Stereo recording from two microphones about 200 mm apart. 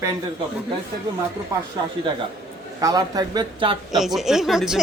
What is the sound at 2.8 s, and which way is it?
Speech, 20° right (ahead or behind).